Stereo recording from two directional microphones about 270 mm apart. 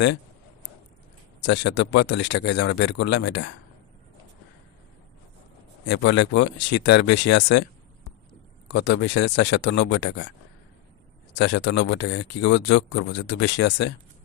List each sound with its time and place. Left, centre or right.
1.4 s speech: left
5.8 s speech: left
8.7 s speech: left
11.3 s speech: left